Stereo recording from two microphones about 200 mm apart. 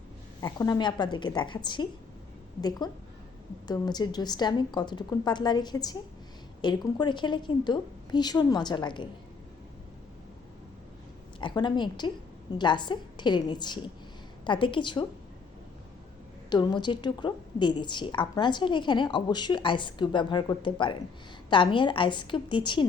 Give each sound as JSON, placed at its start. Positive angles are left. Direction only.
{"t": 0.4, "sound": "a woman's voice", "side_deg": 20}
{"t": 11.3, "sound": "a woman's voice", "side_deg": 20}
{"t": 16.5, "sound": "a woman's voice", "side_deg": 20}